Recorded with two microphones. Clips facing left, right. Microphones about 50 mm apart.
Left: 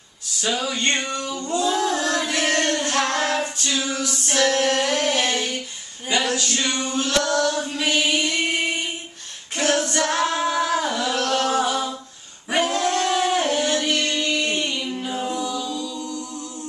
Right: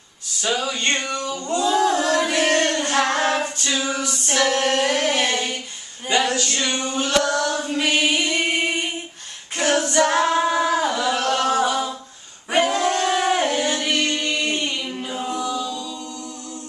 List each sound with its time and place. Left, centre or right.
0.4 s a sound: centre
1.7 s music: centre
3.3 s singing: right
6.0 s a sound: centre
6.9 s chant: centre
7.8 s music: centre
9.6 s female singing: centre
10.0 s singing: centre
12.8 s a sound: centre
13.4 s singing: centre